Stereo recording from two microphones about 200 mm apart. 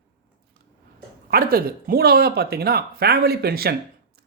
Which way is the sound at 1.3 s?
45° right (ahead or behind).